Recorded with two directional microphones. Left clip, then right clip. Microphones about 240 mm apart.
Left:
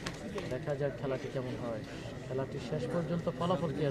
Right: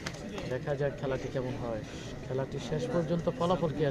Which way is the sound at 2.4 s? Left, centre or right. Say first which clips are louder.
Right 3 dB; right.